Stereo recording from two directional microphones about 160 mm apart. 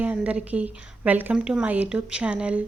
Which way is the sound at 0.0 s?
10° right (ahead or behind).